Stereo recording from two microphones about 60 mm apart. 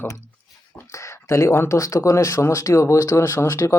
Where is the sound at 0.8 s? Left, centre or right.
Left.